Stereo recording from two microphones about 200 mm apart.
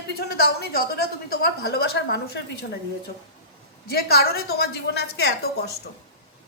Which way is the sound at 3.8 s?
50° left (ahead or behind).